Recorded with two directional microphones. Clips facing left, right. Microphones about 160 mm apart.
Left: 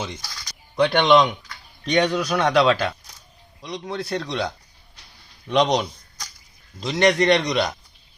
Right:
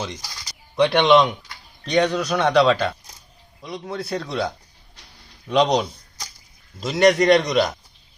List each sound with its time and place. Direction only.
0.2 s bird: 15° right (ahead or behind)
0.8 s a man's voice: centre (ahead or behind)